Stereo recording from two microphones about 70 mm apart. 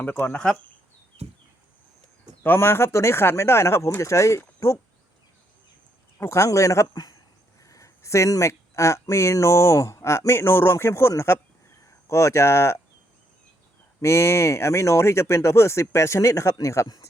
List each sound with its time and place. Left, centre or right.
0.3 s speech: centre
2.4 s speech: left
6.1 s speech: left
6.9 s speech: left
7.6 s speech: left
14.0 s speech: left